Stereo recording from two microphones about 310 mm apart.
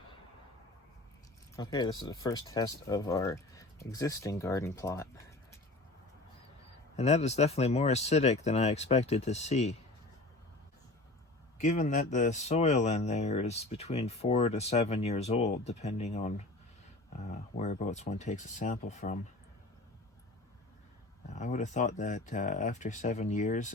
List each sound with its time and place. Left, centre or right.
1.5 s speech: centre
6.9 s speech: left
11.6 s speech: left
21.2 s speech: left